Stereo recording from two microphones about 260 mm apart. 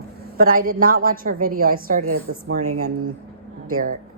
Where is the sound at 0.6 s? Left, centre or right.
Right.